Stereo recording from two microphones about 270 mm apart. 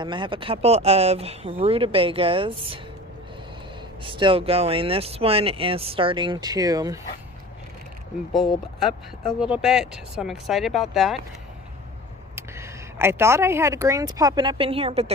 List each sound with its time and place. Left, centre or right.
0.0 s speech: centre
4.0 s speech: centre
9.4 s speech: centre
12.4 s speech: centre